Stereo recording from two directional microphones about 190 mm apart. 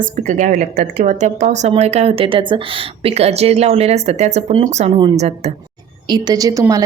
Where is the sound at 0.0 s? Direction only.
45° right (ahead or behind).